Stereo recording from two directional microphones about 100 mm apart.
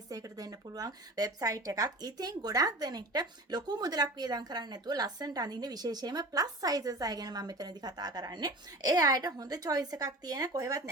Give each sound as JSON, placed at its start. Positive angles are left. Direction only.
{"t": 0.1, "sound": "speech", "side_deg": -40}